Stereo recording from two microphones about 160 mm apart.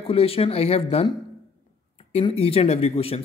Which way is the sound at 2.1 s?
40° left (ahead or behind).